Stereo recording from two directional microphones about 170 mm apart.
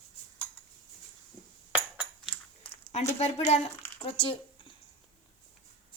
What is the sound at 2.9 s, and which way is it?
Speech, 40° left (ahead or behind).